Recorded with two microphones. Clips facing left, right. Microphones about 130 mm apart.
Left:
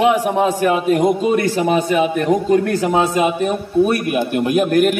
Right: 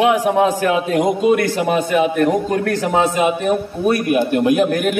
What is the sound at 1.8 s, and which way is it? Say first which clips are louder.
A man's voice: right 1 dB; 5° left (ahead or behind).